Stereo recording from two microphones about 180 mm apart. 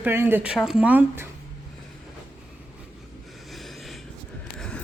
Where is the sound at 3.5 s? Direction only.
Centre (ahead or behind).